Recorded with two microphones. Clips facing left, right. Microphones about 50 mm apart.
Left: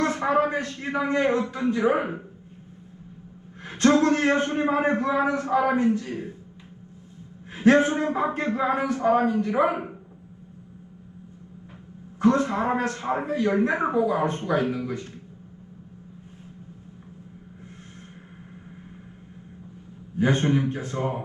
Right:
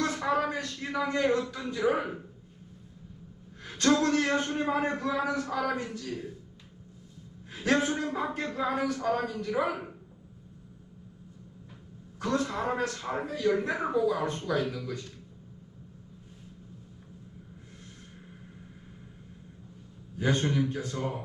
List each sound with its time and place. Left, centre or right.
0.0 s a man's voice: left
3.6 s a man's voice: left
7.5 s a man's voice: left
12.2 s a man's voice: left
20.1 s a man's voice: left